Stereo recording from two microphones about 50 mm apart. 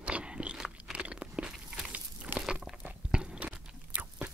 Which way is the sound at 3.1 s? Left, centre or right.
Centre.